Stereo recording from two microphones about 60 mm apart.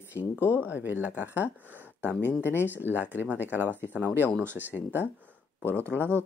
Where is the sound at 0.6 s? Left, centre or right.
Right.